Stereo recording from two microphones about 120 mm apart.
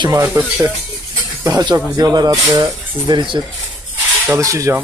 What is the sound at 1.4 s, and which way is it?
Speech, 35° right (ahead or behind).